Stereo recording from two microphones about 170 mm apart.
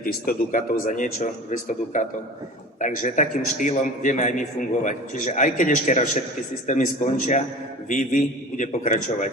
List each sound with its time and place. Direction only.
0.0 s a man's voice: 55° left (ahead or behind)